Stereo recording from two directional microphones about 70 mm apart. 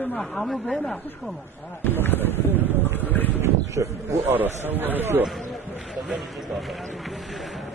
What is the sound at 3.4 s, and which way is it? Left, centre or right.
Speech, right.